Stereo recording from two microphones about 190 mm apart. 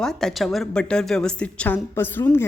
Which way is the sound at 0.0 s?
5° left (ahead or behind).